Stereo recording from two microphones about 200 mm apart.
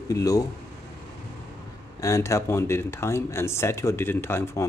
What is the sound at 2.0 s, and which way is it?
A man's voice, 15° left (ahead or behind).